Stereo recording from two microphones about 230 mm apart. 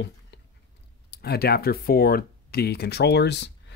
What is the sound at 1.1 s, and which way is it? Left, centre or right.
Speech, left.